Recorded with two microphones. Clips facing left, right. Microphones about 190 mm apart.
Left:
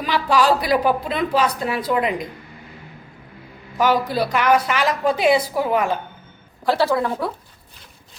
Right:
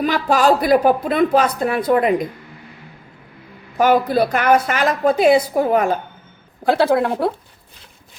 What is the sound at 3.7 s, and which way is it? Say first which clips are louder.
A woman's voice: right 4 dB; 50° right (ahead or behind).